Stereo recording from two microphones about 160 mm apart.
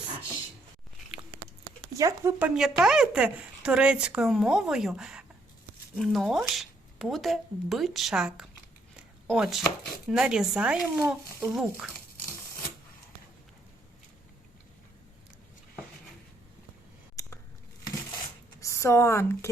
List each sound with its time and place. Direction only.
1.9 s speech: 20° right (ahead or behind)
2.4 s speech: 5° right (ahead or behind)
17.2 s biting: 15° left (ahead or behind)
18.6 s speech: 20° left (ahead or behind)